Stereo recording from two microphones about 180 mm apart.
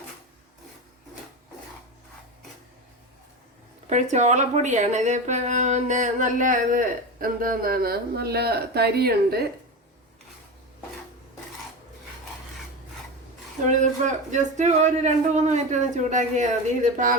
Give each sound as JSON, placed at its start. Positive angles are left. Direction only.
{"t": 3.8, "sound": "speech", "side_deg": -40}
{"t": 13.7, "sound": "a man's voice", "side_deg": -40}